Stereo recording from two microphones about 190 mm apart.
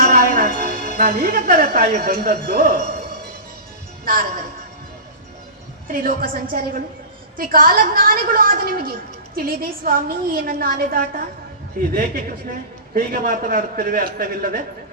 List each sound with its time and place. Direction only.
0.0 s music: 50° right (ahead or behind)
0.9 s a woman's voice: 50° right (ahead or behind)
4.0 s a woman's voice: 50° right (ahead or behind)
5.9 s a woman's voice: 45° right (ahead or behind)